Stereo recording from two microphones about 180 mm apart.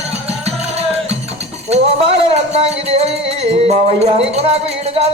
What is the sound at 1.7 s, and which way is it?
Music, 35° right (ahead or behind).